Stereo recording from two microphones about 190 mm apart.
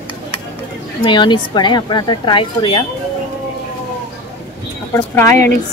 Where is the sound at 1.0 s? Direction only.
25° left (ahead or behind).